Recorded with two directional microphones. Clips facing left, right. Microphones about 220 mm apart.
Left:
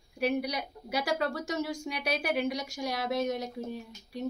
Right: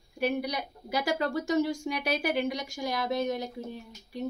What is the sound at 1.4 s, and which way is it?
A woman's voice, 5° left (ahead or behind).